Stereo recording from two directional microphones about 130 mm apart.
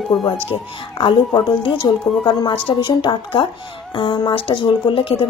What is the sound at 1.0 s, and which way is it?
A woman's voice, 40° left (ahead or behind).